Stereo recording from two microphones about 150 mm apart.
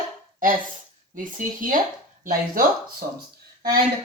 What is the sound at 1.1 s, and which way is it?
Speech, 65° right (ahead or behind).